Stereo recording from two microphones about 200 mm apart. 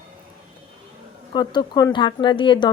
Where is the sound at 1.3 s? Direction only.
20° left (ahead or behind).